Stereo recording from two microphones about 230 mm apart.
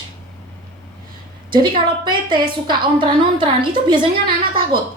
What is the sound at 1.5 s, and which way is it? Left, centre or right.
A woman's voice, centre.